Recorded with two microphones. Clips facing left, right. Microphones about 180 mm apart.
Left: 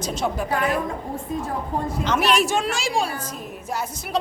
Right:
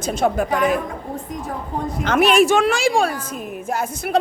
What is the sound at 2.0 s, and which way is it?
A woman's voice, 55° right (ahead or behind).